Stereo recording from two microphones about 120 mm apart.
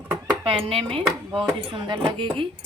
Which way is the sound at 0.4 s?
50° right (ahead or behind).